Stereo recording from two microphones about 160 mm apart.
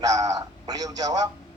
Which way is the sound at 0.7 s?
25° right (ahead or behind).